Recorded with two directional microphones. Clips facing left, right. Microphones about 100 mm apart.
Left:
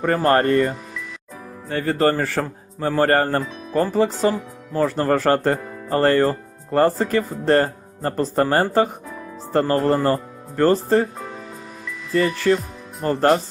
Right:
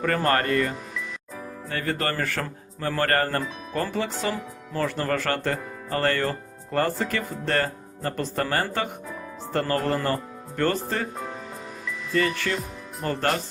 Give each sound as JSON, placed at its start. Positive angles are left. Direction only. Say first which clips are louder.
{"t": 0.0, "sound": "speech", "louder": "left 6 dB", "side_deg": 30}
{"t": 1.7, "sound": "speech", "louder": "left 8 dB", "side_deg": 35}
{"t": 12.5, "sound": "speech", "louder": "left 10 dB", "side_deg": 40}